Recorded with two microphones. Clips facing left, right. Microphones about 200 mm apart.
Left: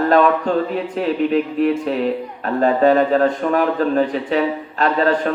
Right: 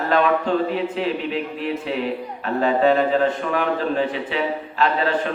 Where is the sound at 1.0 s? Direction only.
45° left (ahead or behind).